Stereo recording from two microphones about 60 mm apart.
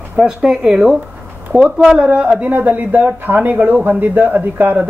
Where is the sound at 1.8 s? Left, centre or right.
Centre.